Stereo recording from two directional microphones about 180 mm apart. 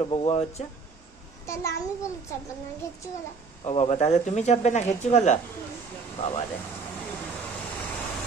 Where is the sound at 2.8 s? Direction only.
15° left (ahead or behind).